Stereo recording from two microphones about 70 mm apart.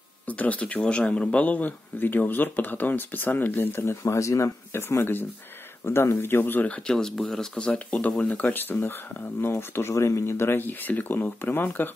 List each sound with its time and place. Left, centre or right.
0.3 s a man's voice: left
4.0 s a man's voice: left
6.7 s a man's voice: centre; by 11.9 s left